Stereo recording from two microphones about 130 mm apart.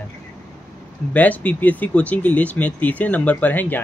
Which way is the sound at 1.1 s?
10° left (ahead or behind).